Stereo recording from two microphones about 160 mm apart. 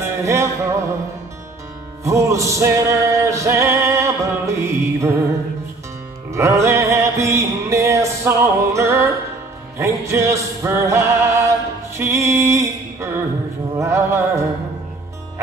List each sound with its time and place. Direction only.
0.0 s music: 15° right (ahead or behind)
2.0 s music: 20° right (ahead or behind)
6.3 s music: 20° right (ahead or behind)